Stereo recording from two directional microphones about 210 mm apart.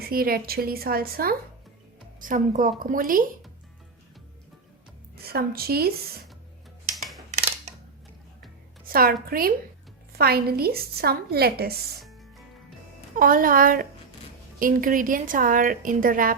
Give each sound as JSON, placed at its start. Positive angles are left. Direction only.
{"t": 0.1, "sound": "a woman's voice", "side_deg": -45}
{"t": 5.1, "sound": "a woman's voice", "side_deg": -45}
{"t": 7.3, "sound": "scissors", "side_deg": -35}
{"t": 8.9, "sound": "a woman's voice", "side_deg": -45}
{"t": 10.2, "sound": "a woman's voice", "side_deg": -45}
{"t": 13.1, "sound": "a woman's voice", "side_deg": -40}